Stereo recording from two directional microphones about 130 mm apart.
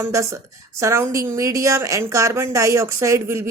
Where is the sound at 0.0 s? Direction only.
25° right (ahead or behind).